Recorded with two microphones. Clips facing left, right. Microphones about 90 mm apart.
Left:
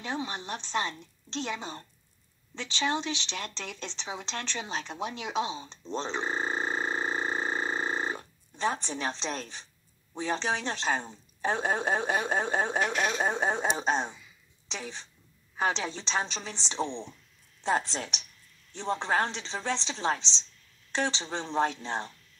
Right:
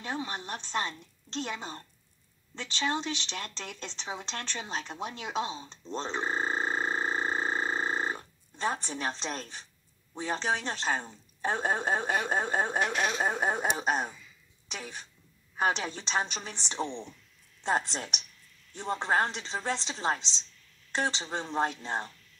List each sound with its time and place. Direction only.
0.0 s speech: 5° right (ahead or behind)
5.9 s a sound: 5° right (ahead or behind)
8.8 s speech: 5° right (ahead or behind)
15.5 s a woman's voice: 10° right (ahead or behind)
16.8 s speech: 20° left (ahead or behind)
17.6 s speech: centre (ahead or behind)